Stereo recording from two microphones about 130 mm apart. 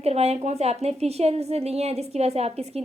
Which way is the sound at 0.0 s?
55° right (ahead or behind).